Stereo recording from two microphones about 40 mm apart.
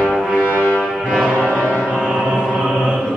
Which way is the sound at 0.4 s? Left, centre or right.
Right.